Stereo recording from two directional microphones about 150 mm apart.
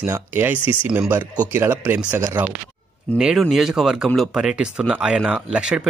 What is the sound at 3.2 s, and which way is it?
Speech, centre (ahead or behind).